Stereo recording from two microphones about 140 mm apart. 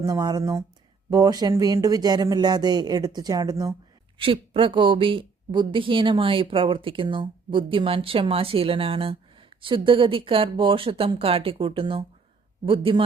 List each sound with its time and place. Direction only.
0.0 s speech: 25° right (ahead or behind)
4.2 s a woman's voice: 40° right (ahead or behind)